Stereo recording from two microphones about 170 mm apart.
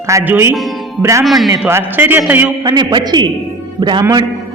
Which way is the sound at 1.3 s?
Centre (ahead or behind).